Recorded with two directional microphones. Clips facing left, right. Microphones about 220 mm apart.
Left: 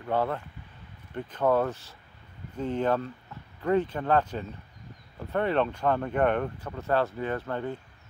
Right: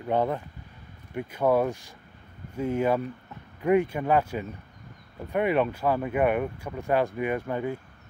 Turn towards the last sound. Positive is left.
turn(degrees=-10)  # may be behind; listen again after turning